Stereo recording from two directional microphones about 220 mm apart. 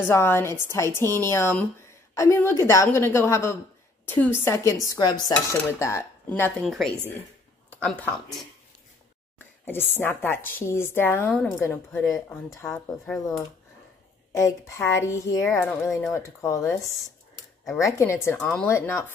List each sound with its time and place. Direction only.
0.0 s speech: 10° left (ahead or behind)
9.7 s speech: 10° left (ahead or behind)
14.3 s speech: 15° left (ahead or behind)